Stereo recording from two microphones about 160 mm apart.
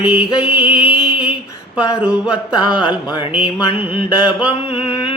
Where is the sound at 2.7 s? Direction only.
30° left (ahead or behind).